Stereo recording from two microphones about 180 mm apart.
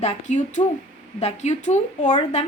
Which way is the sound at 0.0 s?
40° left (ahead or behind).